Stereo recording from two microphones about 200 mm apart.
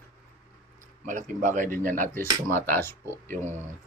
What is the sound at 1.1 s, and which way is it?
Speech, 40° right (ahead or behind).